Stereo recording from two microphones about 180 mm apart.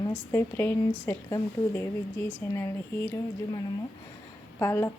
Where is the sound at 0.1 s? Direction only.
15° left (ahead or behind).